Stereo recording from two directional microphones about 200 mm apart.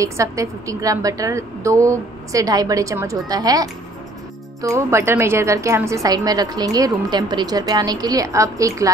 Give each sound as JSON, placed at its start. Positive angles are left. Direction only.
{"t": 0.0, "sound": "a woman's voice", "side_deg": -15}